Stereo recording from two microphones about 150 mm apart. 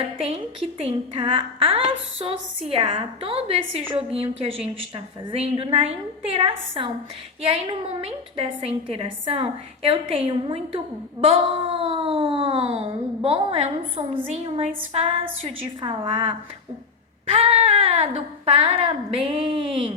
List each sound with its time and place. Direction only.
0.8 s a woman's voice: 35° right (ahead or behind)
17.3 s a woman's voice: 35° right (ahead or behind)